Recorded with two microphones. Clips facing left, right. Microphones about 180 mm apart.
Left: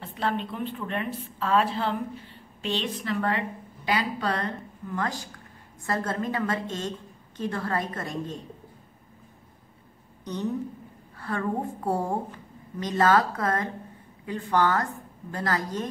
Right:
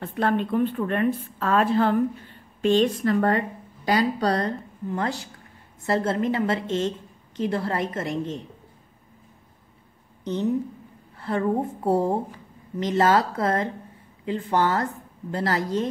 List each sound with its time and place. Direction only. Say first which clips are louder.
0.0 s a woman's voice: right 5 dB; 55° right (ahead or behind); by 8.4 s 25° right (ahead or behind)
11.1 s a woman's voice: right 5 dB; 25° right (ahead or behind)